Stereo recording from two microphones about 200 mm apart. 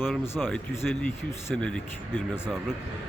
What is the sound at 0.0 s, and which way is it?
Speech, centre (ahead or behind).